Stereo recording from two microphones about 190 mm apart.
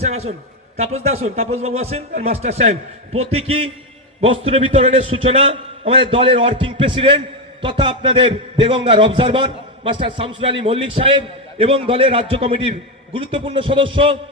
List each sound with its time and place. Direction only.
0.0 s a man's voice: 35° right (ahead or behind)